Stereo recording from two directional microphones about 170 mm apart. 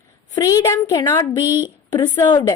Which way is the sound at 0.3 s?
20° left (ahead or behind).